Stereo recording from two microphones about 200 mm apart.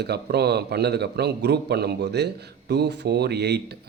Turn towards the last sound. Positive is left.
turn(degrees=-55)  # may be behind; listen again after turning